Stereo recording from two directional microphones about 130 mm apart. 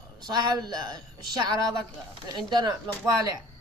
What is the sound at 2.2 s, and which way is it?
Speech, 30° right (ahead or behind).